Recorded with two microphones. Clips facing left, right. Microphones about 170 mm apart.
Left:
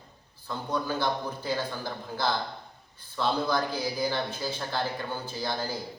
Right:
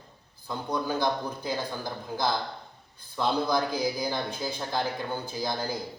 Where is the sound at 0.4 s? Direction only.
15° right (ahead or behind).